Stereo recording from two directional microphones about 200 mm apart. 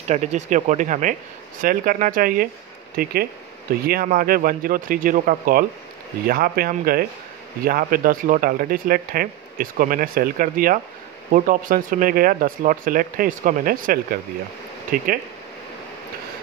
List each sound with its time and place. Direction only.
0.1 s speech: 35° right (ahead or behind)